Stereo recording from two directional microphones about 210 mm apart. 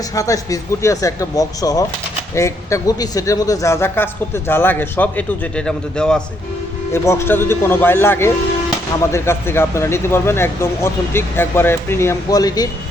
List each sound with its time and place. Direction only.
0.1 s a man's voice: 15° left (ahead or behind)